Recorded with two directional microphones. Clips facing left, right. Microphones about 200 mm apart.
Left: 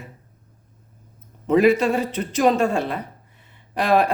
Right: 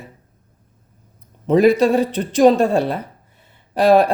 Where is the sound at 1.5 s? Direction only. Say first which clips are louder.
Right 3 dB; 35° right (ahead or behind).